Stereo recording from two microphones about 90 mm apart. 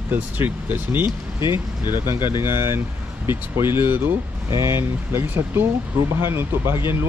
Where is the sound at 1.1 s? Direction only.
60° left (ahead or behind).